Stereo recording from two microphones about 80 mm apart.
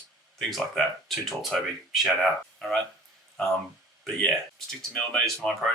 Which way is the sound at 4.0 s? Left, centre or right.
Centre.